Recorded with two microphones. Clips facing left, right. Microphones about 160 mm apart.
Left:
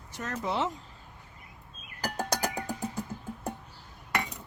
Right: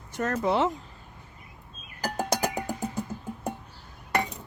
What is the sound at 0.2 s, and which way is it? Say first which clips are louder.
Speech: right 6 dB; 55° right (ahead or behind).